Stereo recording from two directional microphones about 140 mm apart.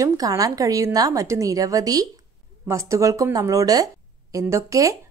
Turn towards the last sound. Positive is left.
turn(degrees=-25)  # may be behind; listen again after turning